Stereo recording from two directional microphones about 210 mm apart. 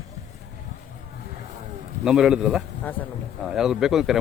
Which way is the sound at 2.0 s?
5° right (ahead or behind).